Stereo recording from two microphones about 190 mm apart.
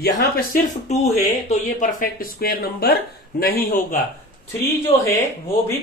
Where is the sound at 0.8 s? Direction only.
35° left (ahead or behind).